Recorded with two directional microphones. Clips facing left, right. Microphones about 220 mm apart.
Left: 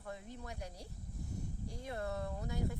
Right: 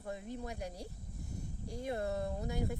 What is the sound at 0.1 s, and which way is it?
Speech, 15° right (ahead or behind).